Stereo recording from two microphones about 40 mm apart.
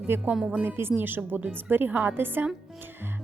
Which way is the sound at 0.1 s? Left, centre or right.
Right.